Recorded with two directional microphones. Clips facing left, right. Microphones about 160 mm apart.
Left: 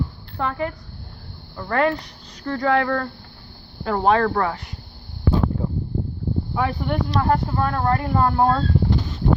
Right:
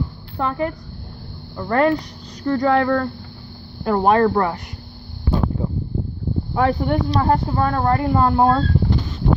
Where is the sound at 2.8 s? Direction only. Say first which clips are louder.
Right 4 dB; 10° right (ahead or behind).